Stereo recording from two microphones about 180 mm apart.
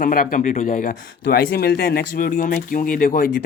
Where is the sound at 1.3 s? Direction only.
60° left (ahead or behind).